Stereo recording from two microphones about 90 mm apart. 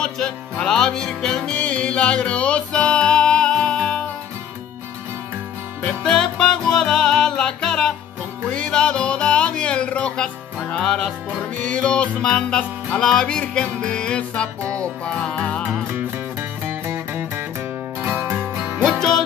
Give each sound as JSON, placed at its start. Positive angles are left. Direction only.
{"t": 0.0, "sound": "music", "side_deg": 10}
{"t": 5.8, "sound": "music", "side_deg": 10}
{"t": 14.6, "sound": "music", "side_deg": -35}
{"t": 15.0, "sound": "music", "side_deg": 10}
{"t": 15.7, "sound": "music", "side_deg": -25}
{"t": 18.9, "sound": "music", "side_deg": 5}